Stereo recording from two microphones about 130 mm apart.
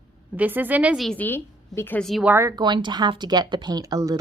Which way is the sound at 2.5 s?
35° right (ahead or behind).